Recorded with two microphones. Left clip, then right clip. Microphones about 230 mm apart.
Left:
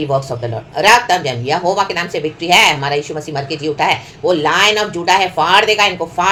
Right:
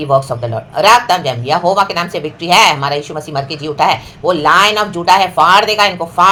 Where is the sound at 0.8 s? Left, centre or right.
Centre.